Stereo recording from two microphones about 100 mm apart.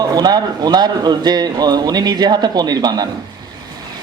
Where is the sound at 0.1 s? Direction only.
40° right (ahead or behind).